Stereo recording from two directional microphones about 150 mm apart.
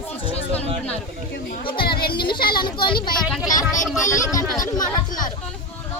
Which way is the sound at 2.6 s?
30° left (ahead or behind).